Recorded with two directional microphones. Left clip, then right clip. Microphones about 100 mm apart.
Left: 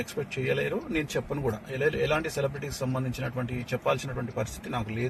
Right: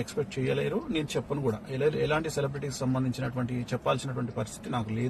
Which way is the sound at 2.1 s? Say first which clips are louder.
Left 1 dB; 15° right (ahead or behind).